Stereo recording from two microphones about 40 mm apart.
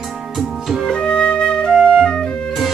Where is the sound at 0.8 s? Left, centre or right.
Left.